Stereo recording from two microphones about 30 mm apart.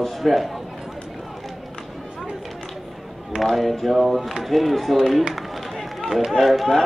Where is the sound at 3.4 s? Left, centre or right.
Centre.